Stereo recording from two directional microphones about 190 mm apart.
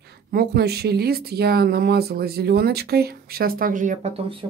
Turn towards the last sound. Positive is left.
turn(degrees=-30)  # may be behind; listen again after turning